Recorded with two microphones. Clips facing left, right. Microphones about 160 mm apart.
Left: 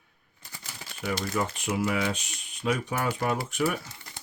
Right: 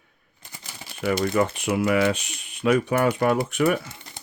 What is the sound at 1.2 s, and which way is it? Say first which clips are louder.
Speech: right 8 dB; 65° right (ahead or behind).